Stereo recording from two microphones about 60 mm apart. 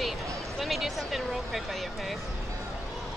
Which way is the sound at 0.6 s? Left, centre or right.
Centre.